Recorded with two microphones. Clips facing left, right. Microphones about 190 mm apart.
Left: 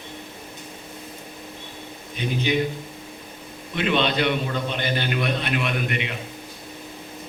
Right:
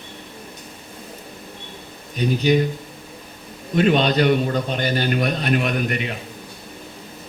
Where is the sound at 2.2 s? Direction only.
40° right (ahead or behind).